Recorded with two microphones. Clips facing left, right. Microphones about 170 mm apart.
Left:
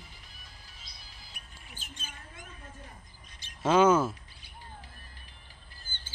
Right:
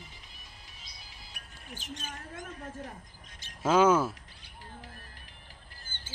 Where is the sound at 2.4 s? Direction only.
50° right (ahead or behind).